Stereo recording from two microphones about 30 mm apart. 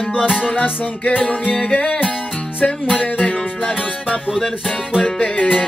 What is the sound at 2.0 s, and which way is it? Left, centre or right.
Music, left.